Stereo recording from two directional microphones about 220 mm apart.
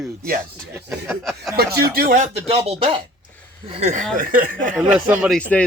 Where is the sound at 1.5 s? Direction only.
45° right (ahead or behind).